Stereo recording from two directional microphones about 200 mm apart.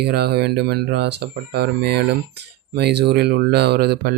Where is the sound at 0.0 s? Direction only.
55° right (ahead or behind).